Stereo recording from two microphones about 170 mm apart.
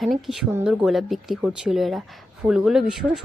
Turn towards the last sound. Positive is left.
turn(degrees=-5)  # may be behind; listen again after turning